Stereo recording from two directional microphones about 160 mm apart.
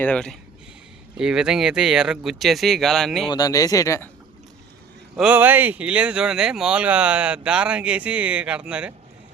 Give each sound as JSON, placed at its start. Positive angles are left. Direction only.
{"t": 0.0, "sound": "speech", "side_deg": 5}
{"t": 1.1, "sound": "speech", "side_deg": -5}
{"t": 3.2, "sound": "speech", "side_deg": 25}
{"t": 5.1, "sound": "speech", "side_deg": -10}